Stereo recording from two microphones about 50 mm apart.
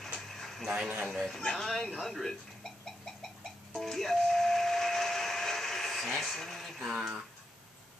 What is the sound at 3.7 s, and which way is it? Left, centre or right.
Steam whistle, centre.